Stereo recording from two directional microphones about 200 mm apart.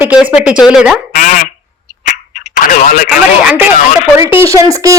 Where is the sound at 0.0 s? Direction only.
5° right (ahead or behind).